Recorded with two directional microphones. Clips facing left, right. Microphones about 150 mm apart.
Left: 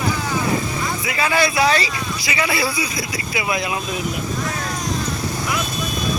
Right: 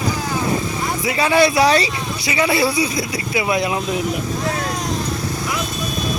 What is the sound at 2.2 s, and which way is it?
Speech, 30° right (ahead or behind).